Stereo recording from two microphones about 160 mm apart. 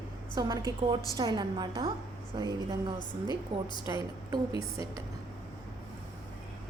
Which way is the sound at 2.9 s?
30° left (ahead or behind).